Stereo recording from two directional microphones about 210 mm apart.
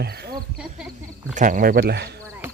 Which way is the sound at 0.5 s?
5° right (ahead or behind).